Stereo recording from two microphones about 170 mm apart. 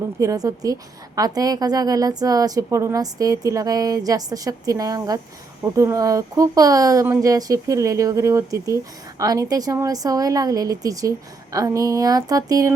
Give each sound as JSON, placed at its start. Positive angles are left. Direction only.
{"t": 0.2, "sound": "speech", "side_deg": -20}